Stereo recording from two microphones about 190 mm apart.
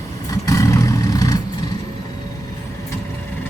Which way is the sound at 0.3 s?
20° left (ahead or behind).